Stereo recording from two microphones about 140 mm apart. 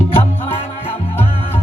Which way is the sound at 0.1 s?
40° left (ahead or behind).